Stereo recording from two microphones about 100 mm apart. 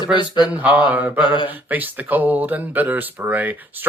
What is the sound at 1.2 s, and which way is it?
Speech, 55° left (ahead or behind).